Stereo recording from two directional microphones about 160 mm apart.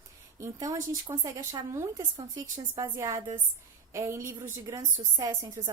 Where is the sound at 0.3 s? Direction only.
20° right (ahead or behind).